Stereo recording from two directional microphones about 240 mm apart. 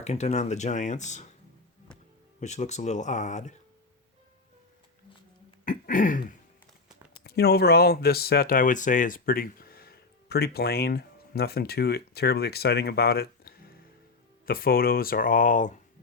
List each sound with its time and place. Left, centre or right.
0.0 s speech: left
2.4 s speech: left
5.6 s throat clearing: left
7.3 s speech: left